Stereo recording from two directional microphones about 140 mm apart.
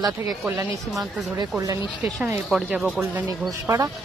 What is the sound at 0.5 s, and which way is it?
Speech, 20° right (ahead or behind).